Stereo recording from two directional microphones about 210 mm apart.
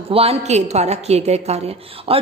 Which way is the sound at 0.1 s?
30° right (ahead or behind).